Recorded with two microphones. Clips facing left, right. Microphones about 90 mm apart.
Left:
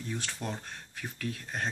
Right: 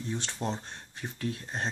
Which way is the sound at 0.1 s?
25° right (ahead or behind).